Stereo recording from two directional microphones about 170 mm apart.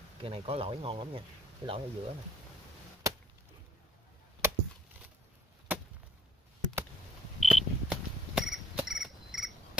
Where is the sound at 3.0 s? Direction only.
15° right (ahead or behind).